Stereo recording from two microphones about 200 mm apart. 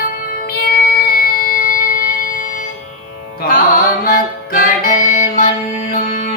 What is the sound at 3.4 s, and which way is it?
Music, 50° left (ahead or behind).